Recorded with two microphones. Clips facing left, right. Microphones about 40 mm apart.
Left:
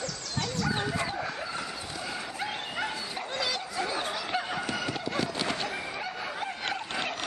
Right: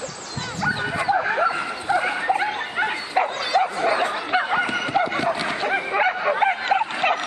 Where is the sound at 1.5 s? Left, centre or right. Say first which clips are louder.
Right 13 dB; right.